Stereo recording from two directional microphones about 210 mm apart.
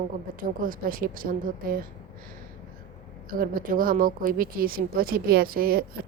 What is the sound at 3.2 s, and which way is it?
A woman's voice, 40° right (ahead or behind).